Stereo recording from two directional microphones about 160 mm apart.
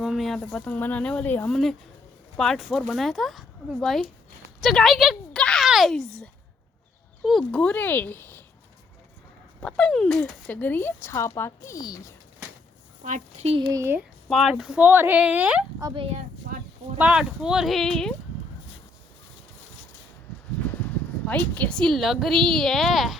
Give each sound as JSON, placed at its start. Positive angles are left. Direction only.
{"t": 0.0, "sound": "a woman's voice", "side_deg": 0}
{"t": 7.3, "sound": "speech", "side_deg": 5}
{"t": 9.6, "sound": "speech", "side_deg": 5}
{"t": 13.1, "sound": "speech", "side_deg": -50}
{"t": 13.6, "sound": "speech", "side_deg": -20}
{"t": 14.3, "sound": "speech", "side_deg": 0}
{"t": 15.8, "sound": "speech", "side_deg": -30}
{"t": 17.0, "sound": "speech", "side_deg": -5}
{"t": 20.8, "sound": "speech", "side_deg": 10}